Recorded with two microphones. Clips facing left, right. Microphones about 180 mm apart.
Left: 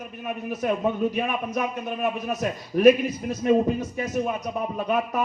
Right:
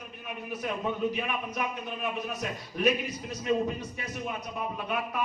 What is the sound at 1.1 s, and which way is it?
A man's voice, 45° left (ahead or behind).